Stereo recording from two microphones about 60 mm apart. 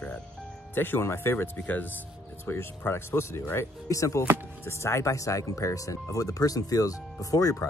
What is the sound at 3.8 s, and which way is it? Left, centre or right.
Speech, left.